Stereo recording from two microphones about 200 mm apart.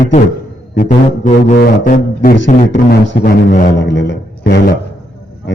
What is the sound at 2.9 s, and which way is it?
A man's voice, 50° left (ahead or behind).